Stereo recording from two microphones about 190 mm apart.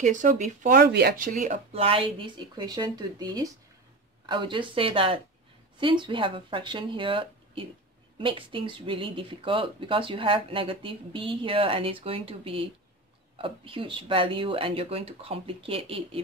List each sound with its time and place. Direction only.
0.0 s speech: 40° right (ahead or behind); by 1.1 s 55° right (ahead or behind)
1.1 s speech: 45° right (ahead or behind)